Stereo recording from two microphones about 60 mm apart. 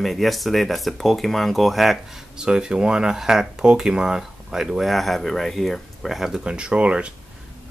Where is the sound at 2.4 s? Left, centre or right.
Centre.